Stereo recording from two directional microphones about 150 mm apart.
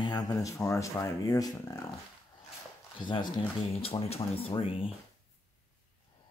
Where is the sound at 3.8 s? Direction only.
40° left (ahead or behind).